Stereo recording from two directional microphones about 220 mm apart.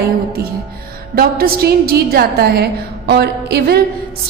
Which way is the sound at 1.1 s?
45° right (ahead or behind).